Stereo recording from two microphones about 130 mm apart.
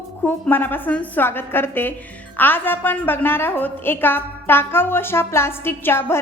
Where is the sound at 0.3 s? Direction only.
15° left (ahead or behind).